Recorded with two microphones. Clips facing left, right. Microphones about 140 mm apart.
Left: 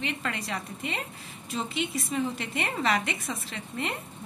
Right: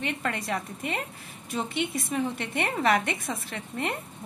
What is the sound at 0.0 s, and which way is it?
A woman's voice, 50° right (ahead or behind).